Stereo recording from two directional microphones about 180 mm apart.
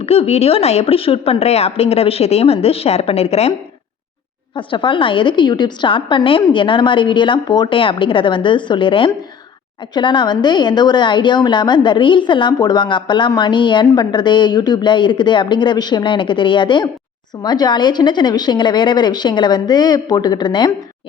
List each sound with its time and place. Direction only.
0.0 s a woman's voice: 35° left (ahead or behind)
4.5 s a woman's voice: 30° left (ahead or behind)